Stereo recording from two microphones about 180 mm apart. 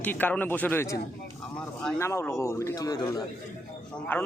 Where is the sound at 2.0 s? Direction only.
15° left (ahead or behind).